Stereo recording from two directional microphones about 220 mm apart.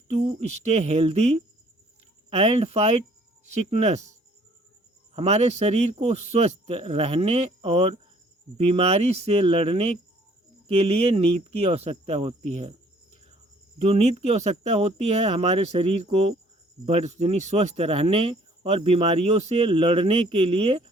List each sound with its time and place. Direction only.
0.1 s speech: 30° right (ahead or behind)
5.1 s speech: 30° right (ahead or behind)
13.7 s speech: 30° right (ahead or behind)